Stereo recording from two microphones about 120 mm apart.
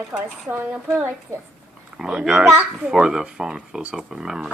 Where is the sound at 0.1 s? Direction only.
15° right (ahead or behind).